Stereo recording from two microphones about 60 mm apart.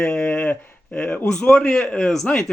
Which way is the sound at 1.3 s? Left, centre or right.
Centre.